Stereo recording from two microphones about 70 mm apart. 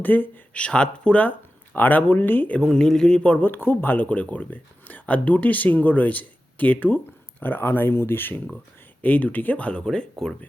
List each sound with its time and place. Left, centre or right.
0.0 s speech: left
0.6 s speech: centre
2.6 s speech: centre
3.4 s speech: left; by 10.3 s centre